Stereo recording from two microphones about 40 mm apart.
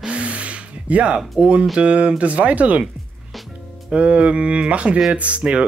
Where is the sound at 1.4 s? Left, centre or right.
Right.